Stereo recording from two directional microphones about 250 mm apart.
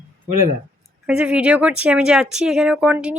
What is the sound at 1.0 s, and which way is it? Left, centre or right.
Speech, centre.